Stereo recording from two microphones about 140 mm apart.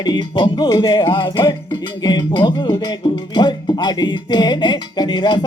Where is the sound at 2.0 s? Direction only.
30° left (ahead or behind).